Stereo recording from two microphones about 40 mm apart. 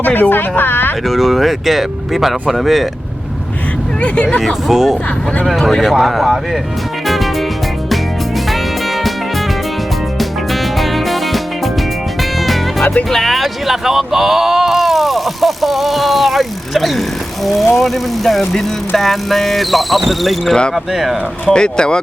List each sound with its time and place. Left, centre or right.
0.0 s speech: left
1.0 s speech: centre
4.0 s speech: left
4.7 s speech: centre
5.5 s speech: centre
10.2 s music: centre
12.8 s speech: left
13.1 s a sound: centre
17.4 s speech: centre
21.5 s speech: left